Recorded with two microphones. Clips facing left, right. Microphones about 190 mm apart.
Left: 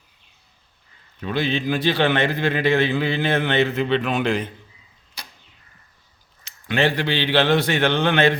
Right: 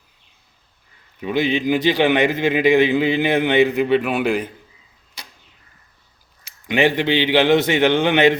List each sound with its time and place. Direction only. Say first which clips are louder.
1.2 s a man's voice: right 4 dB; 15° right (ahead or behind)
6.4 s a man's voice: right 3 dB; 15° right (ahead or behind)